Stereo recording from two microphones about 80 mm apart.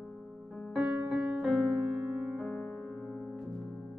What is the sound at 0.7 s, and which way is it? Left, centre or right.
Music, centre.